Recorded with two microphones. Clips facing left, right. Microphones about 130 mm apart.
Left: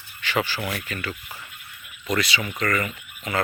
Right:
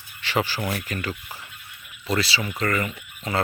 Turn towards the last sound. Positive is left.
turn(degrees=-30)  # may be behind; listen again after turning